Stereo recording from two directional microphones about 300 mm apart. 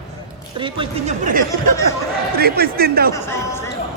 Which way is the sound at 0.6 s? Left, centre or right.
Centre.